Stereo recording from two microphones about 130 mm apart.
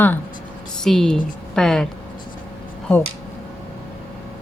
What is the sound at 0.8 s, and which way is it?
A woman's voice, 5° left (ahead or behind).